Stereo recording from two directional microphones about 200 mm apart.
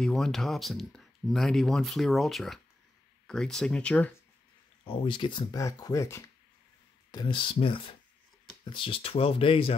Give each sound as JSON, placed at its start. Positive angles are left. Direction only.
{"t": 0.0, "sound": "speech", "side_deg": 0}
{"t": 4.8, "sound": "speech", "side_deg": 25}